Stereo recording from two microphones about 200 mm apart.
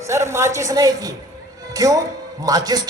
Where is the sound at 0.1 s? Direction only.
15° right (ahead or behind).